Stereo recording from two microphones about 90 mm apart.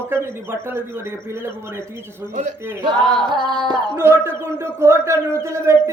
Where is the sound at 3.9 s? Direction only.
25° right (ahead or behind).